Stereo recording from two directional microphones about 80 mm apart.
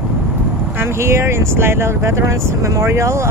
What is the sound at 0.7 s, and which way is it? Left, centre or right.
Speech, right.